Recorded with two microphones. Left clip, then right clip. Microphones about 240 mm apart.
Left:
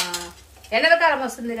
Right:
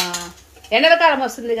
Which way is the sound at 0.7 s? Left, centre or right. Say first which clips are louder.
Right 4 dB; right.